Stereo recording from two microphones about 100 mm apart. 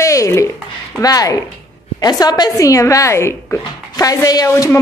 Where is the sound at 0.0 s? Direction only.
30° left (ahead or behind).